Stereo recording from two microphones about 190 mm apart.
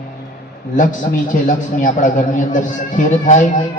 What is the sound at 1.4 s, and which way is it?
A man's voice, 45° left (ahead or behind).